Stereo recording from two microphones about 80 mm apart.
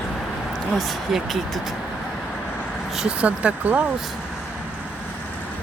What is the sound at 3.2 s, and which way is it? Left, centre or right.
Speech, centre.